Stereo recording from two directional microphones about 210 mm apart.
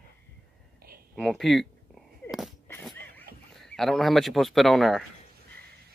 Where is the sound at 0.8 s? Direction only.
45° right (ahead or behind).